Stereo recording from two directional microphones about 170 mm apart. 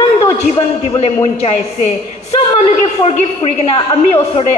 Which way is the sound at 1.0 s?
40° left (ahead or behind).